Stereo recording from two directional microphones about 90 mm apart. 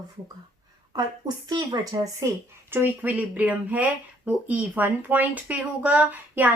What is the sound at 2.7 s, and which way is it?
Speech, 20° right (ahead or behind).